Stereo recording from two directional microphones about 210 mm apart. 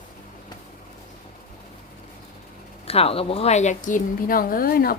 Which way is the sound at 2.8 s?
30° left (ahead or behind).